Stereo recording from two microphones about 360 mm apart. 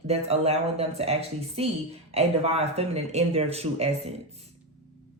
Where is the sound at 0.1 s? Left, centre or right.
Centre.